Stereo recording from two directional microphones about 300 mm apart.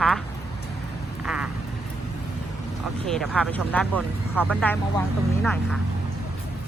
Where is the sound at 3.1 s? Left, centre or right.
Centre.